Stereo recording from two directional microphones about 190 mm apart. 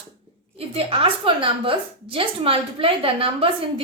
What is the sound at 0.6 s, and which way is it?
A woman's voice, 30° right (ahead or behind).